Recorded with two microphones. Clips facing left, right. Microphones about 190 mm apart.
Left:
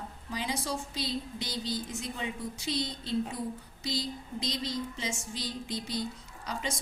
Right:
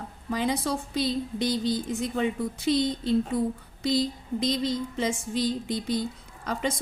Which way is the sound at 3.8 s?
55° right (ahead or behind).